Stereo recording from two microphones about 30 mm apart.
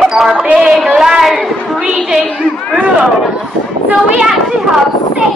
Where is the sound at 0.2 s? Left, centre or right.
Right.